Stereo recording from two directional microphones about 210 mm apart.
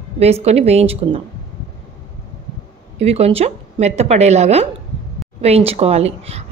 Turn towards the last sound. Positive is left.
turn(degrees=-30)  # may be behind; listen again after turning